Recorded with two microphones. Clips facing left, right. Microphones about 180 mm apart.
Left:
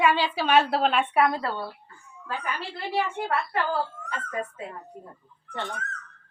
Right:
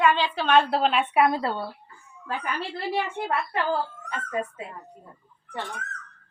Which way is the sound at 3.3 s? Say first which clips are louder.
Right 1 dB; 20° right (ahead or behind).